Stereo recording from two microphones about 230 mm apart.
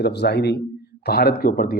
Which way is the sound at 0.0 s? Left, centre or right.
Left.